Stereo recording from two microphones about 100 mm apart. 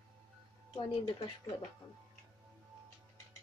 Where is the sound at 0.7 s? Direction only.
55° left (ahead or behind).